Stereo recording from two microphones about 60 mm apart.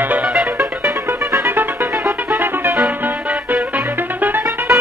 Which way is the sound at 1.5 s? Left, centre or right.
Right.